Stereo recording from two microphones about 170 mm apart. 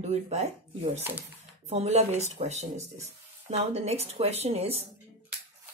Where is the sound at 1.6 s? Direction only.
40° right (ahead or behind).